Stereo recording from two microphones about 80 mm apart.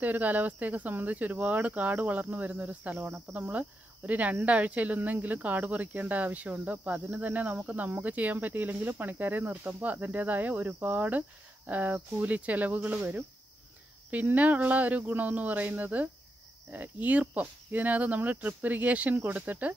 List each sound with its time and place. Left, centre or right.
0.0 s speech: right